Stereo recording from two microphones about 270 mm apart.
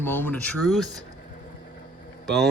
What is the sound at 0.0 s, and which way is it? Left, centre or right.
Speech, centre.